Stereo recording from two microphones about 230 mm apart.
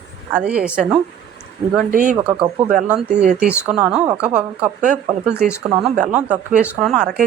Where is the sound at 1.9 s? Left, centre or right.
Right.